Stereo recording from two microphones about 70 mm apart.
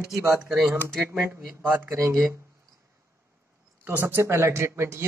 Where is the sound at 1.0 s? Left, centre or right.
Right.